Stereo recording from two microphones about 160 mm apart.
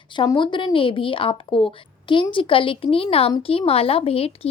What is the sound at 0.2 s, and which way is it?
A woman's voice, 30° left (ahead or behind).